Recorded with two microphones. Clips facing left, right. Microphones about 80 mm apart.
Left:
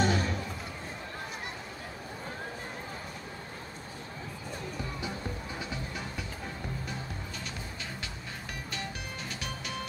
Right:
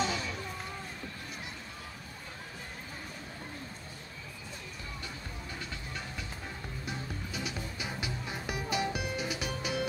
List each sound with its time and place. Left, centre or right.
0.0 s music: left
7.3 s music: centre